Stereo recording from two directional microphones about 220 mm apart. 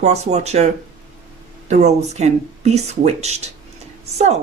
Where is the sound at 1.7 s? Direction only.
30° right (ahead or behind).